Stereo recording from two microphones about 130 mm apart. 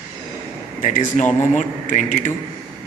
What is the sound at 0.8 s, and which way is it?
A man's voice, 80° left.